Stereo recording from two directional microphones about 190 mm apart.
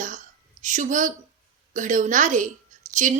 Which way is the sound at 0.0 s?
40° right (ahead or behind).